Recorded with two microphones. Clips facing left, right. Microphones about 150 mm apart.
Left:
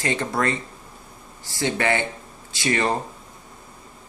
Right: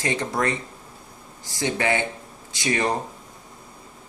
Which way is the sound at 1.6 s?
15° right (ahead or behind).